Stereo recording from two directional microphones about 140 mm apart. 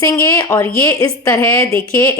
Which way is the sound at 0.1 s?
25° left (ahead or behind).